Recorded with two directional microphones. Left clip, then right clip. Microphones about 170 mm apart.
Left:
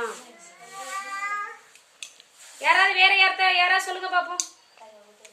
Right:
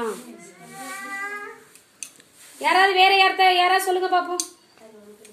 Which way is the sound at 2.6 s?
Centre (ahead or behind).